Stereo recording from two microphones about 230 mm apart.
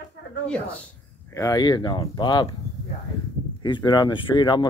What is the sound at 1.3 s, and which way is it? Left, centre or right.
Speech, centre.